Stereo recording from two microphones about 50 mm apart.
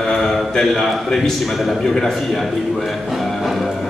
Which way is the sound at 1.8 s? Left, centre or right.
Centre.